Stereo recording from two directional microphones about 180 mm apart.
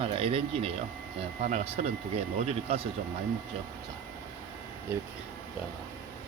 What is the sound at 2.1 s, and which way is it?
Speech, 35° right (ahead or behind).